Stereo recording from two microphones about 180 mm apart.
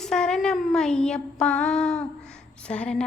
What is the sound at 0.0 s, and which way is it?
Child singing, 5° left (ahead or behind).